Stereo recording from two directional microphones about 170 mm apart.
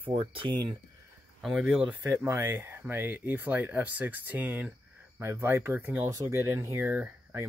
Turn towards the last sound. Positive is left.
turn(degrees=-10)  # may be behind; listen again after turning